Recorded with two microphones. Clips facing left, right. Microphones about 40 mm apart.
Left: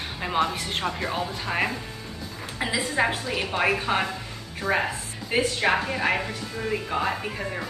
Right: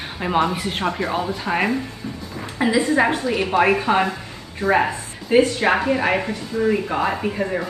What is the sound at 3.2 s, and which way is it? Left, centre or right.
Speech, centre.